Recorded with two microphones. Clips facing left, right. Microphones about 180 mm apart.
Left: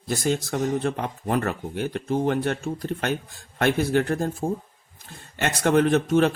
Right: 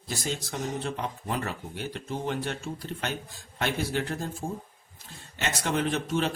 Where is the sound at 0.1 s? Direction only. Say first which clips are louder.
Left 9 dB; 55° left (ahead or behind).